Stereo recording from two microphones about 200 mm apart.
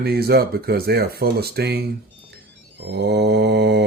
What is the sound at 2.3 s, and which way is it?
Mantra, 55° right (ahead or behind).